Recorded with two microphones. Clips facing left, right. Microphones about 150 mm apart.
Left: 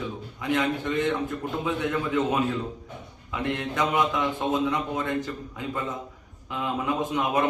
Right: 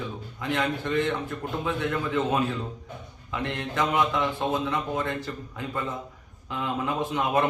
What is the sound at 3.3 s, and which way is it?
A man's voice, 15° left (ahead or behind).